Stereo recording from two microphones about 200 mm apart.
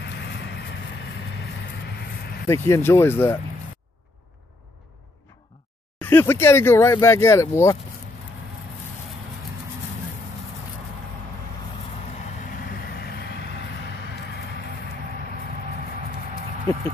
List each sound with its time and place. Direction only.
0.0 s vehicle: 55° left (ahead or behind)
2.4 s speech: 15° left (ahead or behind)
5.9 s speech: 10° left (ahead or behind)
12.4 s vehicle: 50° left (ahead or behind)